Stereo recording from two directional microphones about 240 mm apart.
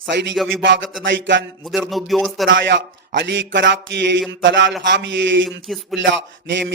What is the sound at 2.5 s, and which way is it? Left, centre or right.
A man's voice, right.